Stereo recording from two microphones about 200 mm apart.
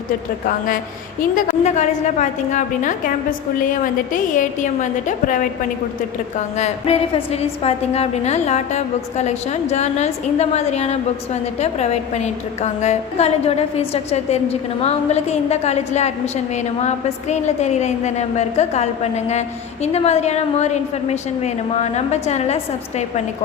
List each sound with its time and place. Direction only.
1.6 s a woman's voice: 35° left (ahead or behind)
6.6 s a woman's voice: 35° left (ahead or behind)